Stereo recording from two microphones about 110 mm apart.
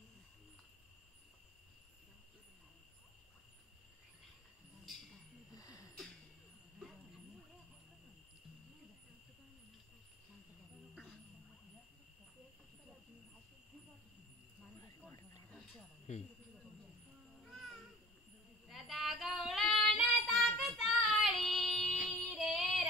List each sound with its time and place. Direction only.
5.5 s a sound: 30° left (ahead or behind)
17.5 s babbling: centre (ahead or behind)
18.7 s child singing: centre (ahead or behind)